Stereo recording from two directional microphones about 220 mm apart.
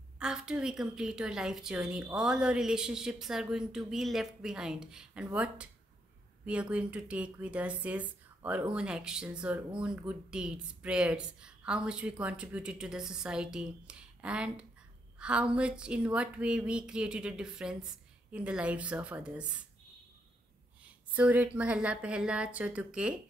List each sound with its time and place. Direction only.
0.2 s speech: 5° right (ahead or behind)
21.1 s speech: 5° right (ahead or behind)